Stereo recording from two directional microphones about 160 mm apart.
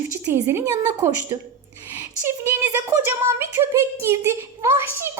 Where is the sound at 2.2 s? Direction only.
15° right (ahead or behind).